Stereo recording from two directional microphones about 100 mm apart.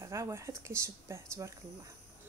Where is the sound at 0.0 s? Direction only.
30° right (ahead or behind).